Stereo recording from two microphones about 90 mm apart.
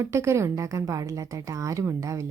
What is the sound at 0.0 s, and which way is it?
Speech, 30° right (ahead or behind).